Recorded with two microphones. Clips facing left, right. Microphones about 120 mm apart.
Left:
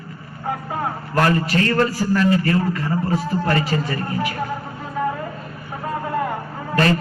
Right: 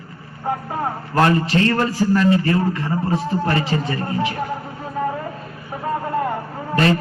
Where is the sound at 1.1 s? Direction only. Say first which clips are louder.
Right 2 dB; 25° right (ahead or behind).